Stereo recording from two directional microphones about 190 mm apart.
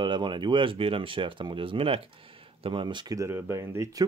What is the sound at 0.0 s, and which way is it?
Speech, 25° right (ahead or behind).